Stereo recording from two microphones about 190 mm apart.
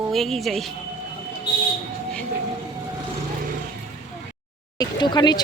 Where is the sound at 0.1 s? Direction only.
Centre (ahead or behind).